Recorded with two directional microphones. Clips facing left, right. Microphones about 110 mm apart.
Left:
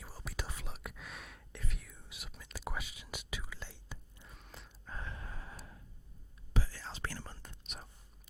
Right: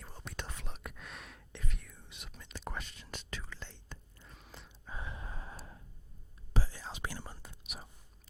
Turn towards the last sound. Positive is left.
turn(degrees=-5)  # may be behind; listen again after turning